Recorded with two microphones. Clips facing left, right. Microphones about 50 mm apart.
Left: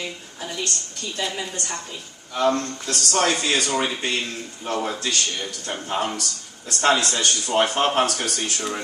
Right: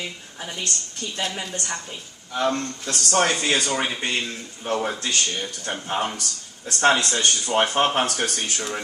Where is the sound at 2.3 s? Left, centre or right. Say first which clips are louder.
Left 2 dB; right.